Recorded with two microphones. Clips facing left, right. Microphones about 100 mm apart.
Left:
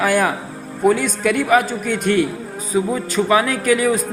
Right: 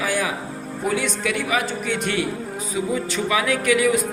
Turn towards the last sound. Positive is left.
turn(degrees=40)  # may be behind; listen again after turning